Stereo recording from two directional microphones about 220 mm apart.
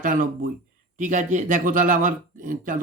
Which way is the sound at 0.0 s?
40° right (ahead or behind).